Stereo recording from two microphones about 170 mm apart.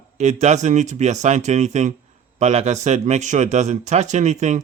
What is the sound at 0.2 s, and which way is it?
Speech, 45° right (ahead or behind).